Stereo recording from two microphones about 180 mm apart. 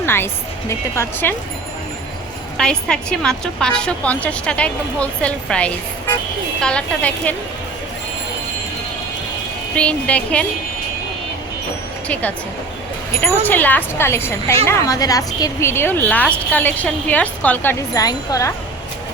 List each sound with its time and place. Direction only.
0.0 s music: 15° left (ahead or behind)
0.7 s a woman's voice: 15° left (ahead or behind)
2.6 s a woman's voice: 5° left (ahead or behind)
9.7 s a woman's voice: 5° left (ahead or behind)
12.0 s a woman's voice: 10° left (ahead or behind)